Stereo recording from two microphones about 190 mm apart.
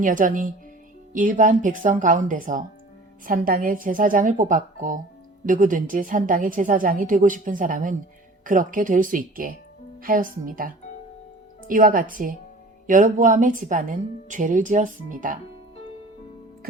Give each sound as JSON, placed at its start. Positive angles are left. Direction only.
{"t": 0.0, "sound": "a woman's voice", "side_deg": -45}
{"t": 11.7, "sound": "a woman's voice", "side_deg": -45}